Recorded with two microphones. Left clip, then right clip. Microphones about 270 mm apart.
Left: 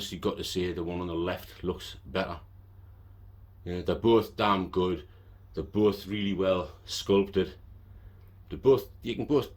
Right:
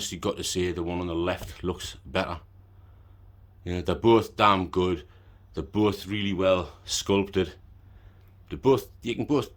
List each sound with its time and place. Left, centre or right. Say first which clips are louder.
0.0 s speech: right 2 dB; centre
3.6 s speech: right 3 dB; right